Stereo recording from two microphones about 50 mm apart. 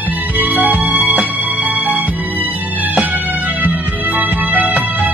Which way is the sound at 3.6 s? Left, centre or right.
Right.